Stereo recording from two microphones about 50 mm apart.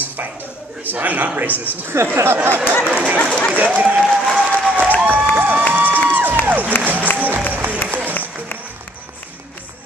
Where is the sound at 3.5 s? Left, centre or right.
Right.